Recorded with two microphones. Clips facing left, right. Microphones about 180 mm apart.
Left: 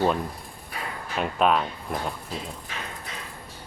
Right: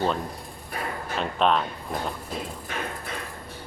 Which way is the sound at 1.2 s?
5° left (ahead or behind).